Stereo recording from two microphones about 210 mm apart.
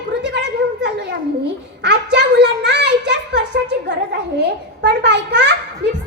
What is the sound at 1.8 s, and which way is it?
A woman's voice, 55° right (ahead or behind).